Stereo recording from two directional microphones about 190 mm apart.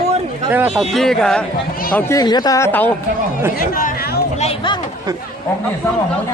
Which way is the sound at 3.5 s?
45° left (ahead or behind).